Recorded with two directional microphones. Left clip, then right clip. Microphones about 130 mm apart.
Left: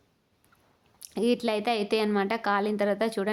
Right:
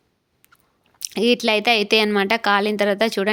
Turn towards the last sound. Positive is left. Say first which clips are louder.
# right 8 dB
turn(degrees=-25)  # may be behind; listen again after turning